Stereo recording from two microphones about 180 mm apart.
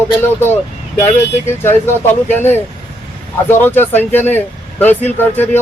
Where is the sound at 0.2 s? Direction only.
10° left (ahead or behind).